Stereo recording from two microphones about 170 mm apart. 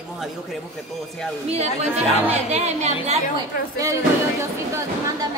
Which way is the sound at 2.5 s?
40° right (ahead or behind).